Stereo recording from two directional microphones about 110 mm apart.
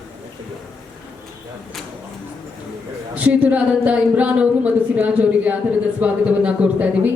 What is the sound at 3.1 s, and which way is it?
Speech, 15° right (ahead or behind).